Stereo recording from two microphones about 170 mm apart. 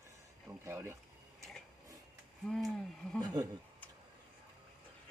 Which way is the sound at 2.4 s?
Centre (ahead or behind).